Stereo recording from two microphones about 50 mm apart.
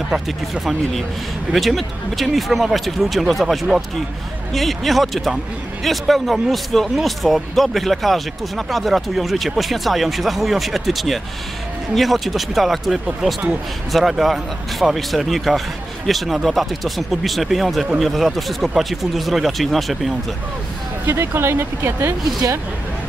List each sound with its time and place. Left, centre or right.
1.5 s speech: centre
21.1 s speech: right